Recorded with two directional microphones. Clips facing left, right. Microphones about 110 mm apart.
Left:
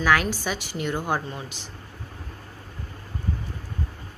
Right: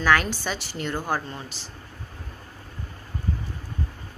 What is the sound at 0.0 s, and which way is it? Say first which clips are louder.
Speech: even; 5° left (ahead or behind).